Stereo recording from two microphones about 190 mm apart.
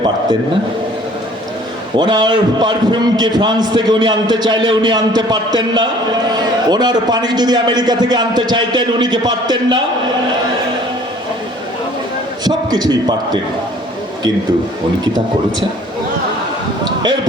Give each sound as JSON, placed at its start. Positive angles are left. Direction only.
{"t": 2.0, "sound": "a man's voice", "side_deg": -25}
{"t": 12.5, "sound": "a man's voice", "side_deg": -20}